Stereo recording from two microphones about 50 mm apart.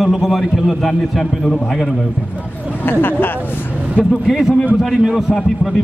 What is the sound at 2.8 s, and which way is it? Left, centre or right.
Speech, left.